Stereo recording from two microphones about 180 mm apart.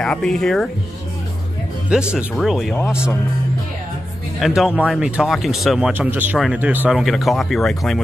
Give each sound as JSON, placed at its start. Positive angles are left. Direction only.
{"t": 0.0, "sound": "speech", "side_deg": 5}
{"t": 1.9, "sound": "speech", "side_deg": -5}
{"t": 4.4, "sound": "speech", "side_deg": -5}